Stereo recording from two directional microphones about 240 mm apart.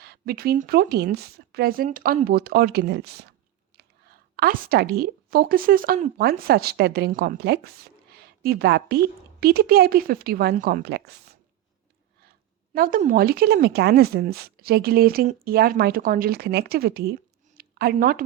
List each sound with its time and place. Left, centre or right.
0.0 s a woman's voice: right
12.7 s speech: right
17.6 s a sound: right